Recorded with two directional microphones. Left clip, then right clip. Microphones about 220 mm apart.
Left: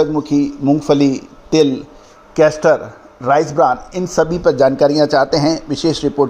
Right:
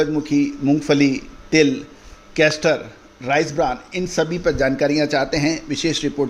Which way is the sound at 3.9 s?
10° left (ahead or behind).